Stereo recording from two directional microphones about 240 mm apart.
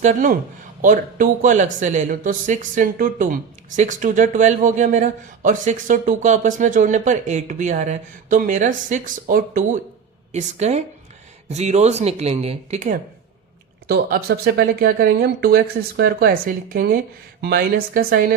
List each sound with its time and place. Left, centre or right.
0.0 s speech: right
13.8 s speech: right